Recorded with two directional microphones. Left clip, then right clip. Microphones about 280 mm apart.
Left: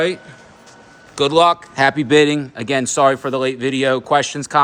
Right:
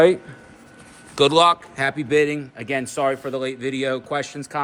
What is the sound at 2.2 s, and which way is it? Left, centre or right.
Speech, left.